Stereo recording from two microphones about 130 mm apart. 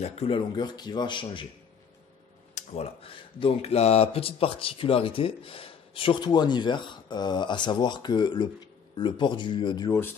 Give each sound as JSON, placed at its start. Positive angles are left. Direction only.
{"t": 0.0, "sound": "speech", "side_deg": 50}
{"t": 0.6, "sound": "speech", "side_deg": 35}
{"t": 2.5, "sound": "speech", "side_deg": 55}
{"t": 9.8, "sound": "speech", "side_deg": 20}